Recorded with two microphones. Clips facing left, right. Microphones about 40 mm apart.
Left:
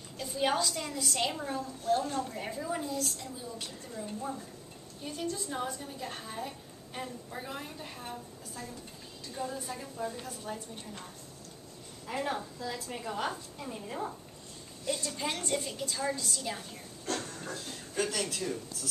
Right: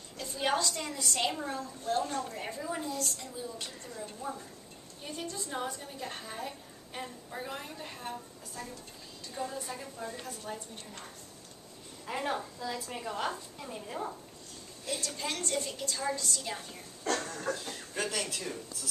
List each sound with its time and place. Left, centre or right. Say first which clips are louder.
0.2 s a woman's voice: left 1 dB; centre
9.3 s a woman's voice: even; centre
12.1 s a woman's voice: even; centre
15.0 s a woman's voice: left 1 dB; centre
17.5 s speech: right 8 dB; right
17.9 s a woman's voice: left 2 dB; centre